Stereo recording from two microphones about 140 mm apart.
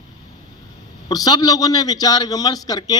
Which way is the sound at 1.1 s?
30° left (ahead or behind).